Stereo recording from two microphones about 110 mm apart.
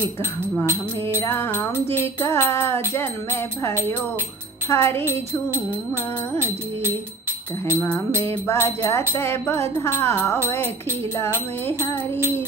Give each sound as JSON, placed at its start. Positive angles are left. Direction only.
{"t": 1.2, "sound": "music", "side_deg": 25}
{"t": 8.5, "sound": "music", "side_deg": 25}